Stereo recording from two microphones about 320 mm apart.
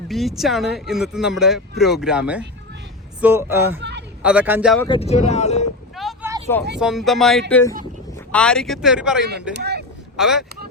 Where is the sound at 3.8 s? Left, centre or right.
Right.